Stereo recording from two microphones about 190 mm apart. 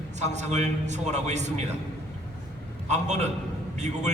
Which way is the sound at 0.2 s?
40° right (ahead or behind).